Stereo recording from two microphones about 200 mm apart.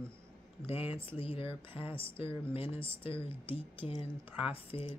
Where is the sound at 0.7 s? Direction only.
30° left (ahead or behind).